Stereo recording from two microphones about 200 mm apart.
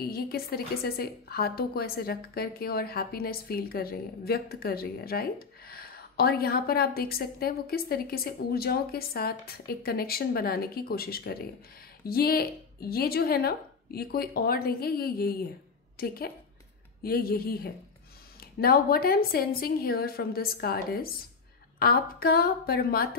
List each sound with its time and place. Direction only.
0.0 s a woman's voice: 50° left (ahead or behind)